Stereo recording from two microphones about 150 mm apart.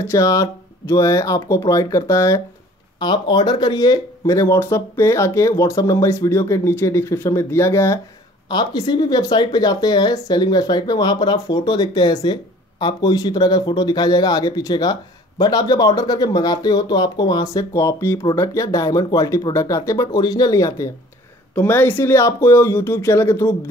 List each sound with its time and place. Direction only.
0.0 s speech: 20° left (ahead or behind)